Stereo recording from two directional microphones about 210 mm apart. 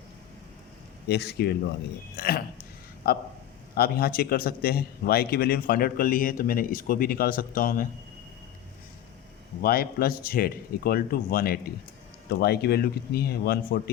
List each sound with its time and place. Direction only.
1.0 s a man's voice: 50° left (ahead or behind)
9.6 s a man's voice: 45° left (ahead or behind)